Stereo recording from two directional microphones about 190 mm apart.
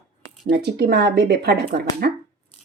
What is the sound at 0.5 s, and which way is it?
Speech, 55° right (ahead or behind).